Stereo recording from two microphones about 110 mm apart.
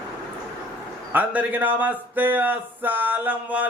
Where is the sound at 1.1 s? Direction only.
15° right (ahead or behind).